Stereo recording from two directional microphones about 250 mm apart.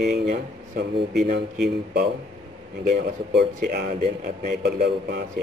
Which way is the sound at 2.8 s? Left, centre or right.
Right.